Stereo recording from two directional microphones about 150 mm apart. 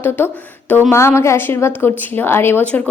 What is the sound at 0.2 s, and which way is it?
A woman's voice, 15° left (ahead or behind).